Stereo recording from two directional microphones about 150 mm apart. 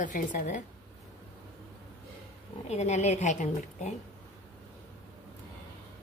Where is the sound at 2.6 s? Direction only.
50° left (ahead or behind).